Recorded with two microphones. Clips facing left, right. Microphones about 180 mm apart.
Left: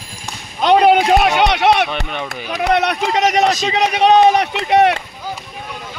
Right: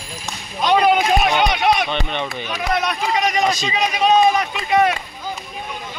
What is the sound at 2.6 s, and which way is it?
A man's voice, 70° left (ahead or behind).